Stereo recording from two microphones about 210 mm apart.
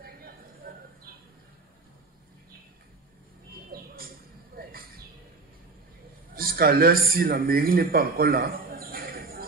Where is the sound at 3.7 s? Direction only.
45° right (ahead or behind).